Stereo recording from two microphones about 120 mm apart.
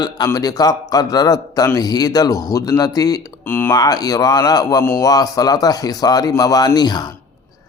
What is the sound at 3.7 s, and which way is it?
A man's voice, 30° left (ahead or behind).